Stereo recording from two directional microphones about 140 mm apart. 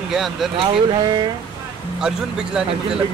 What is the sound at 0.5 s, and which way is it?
Speech, 30° right (ahead or behind).